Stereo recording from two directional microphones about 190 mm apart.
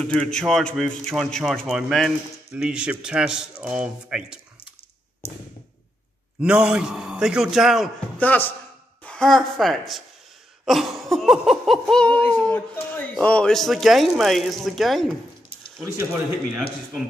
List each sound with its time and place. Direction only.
0.0 s a man's voice: 5° left (ahead or behind)
6.4 s a man's voice: 5° right (ahead or behind)
10.6 s a sound: centre (ahead or behind)